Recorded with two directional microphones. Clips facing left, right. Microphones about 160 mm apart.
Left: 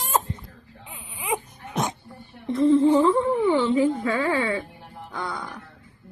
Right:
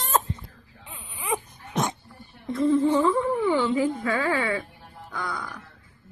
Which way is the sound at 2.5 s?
25° left (ahead or behind).